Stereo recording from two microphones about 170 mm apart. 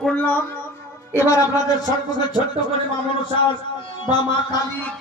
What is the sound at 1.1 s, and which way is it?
Speech, 15° left (ahead or behind).